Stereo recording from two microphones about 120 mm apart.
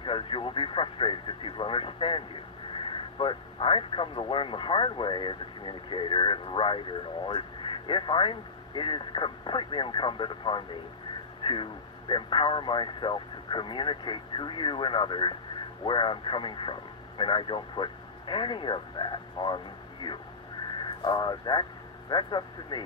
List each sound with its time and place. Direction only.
0.0 s speech: 45° left (ahead or behind)